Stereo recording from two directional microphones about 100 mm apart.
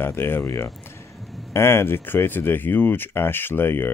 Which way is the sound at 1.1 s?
Centre (ahead or behind).